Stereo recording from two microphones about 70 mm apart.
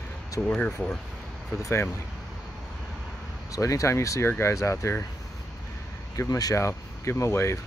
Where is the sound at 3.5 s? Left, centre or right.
Left.